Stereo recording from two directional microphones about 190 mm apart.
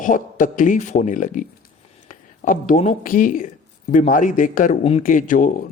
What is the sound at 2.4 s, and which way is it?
Speech, 45° left (ahead or behind).